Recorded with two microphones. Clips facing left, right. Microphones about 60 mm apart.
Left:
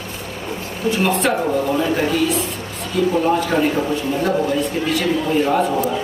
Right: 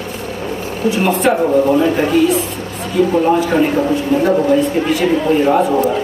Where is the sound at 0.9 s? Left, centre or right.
Centre.